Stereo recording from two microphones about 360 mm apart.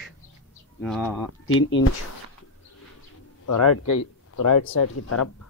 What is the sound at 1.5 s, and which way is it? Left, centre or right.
Speech, left.